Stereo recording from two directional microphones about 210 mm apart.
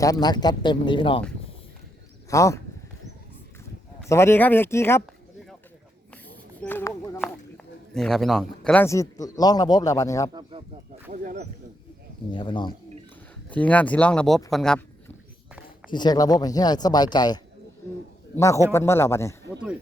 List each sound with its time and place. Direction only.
0.0 s speech: 15° left (ahead or behind)
2.3 s speech: 15° left (ahead or behind)
4.1 s speech: 10° left (ahead or behind)
6.6 s a sound: 10° left (ahead or behind)
9.2 s speech: 15° left (ahead or behind)
11.1 s speech: 40° right (ahead or behind)
12.3 s speech: 25° left (ahead or behind)
13.5 s speech: 5° left (ahead or behind)
15.9 s speech: 20° left (ahead or behind)